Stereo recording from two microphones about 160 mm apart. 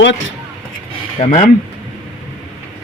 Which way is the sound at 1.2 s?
45° left (ahead or behind).